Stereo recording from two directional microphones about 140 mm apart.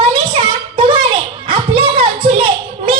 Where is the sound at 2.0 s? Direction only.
40° right (ahead or behind).